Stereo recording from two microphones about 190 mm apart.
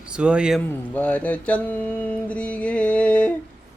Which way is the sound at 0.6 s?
10° left (ahead or behind).